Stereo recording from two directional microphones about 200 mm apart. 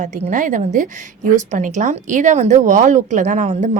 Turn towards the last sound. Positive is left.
turn(degrees=-35)  # may be behind; listen again after turning